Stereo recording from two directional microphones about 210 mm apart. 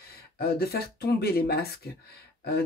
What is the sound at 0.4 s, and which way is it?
Speech, 50° left (ahead or behind).